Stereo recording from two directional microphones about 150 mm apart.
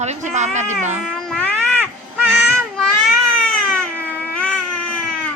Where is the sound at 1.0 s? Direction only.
5° left (ahead or behind).